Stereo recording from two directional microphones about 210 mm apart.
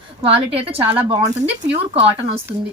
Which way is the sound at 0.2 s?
25° right (ahead or behind).